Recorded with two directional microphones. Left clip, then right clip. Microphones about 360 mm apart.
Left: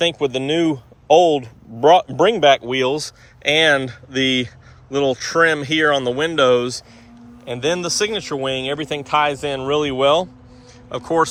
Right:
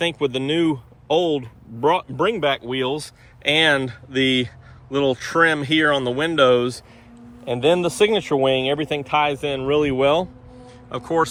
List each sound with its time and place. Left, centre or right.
0.0 s a man's voice: centre